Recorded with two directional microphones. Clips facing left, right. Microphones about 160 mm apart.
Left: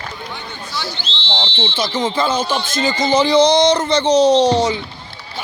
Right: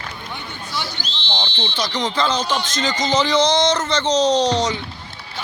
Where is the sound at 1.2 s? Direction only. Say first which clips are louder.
Left 4 dB; 25° left (ahead or behind).